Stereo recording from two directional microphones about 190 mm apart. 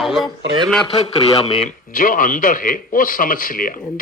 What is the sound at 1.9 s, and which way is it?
A man's voice, 45° left (ahead or behind).